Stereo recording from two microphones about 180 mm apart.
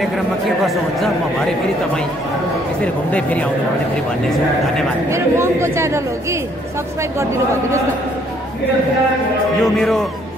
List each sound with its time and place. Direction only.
0.7 s speech: centre (ahead or behind)
2.8 s speech: 5° left (ahead or behind)
5.1 s speech: 15° right (ahead or behind)
9.6 s speech: centre (ahead or behind)